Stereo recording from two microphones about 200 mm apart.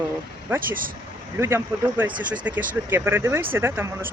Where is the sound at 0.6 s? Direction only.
45° right (ahead or behind).